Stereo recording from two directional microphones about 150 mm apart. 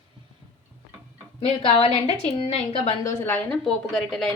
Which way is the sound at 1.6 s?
40° left (ahead or behind).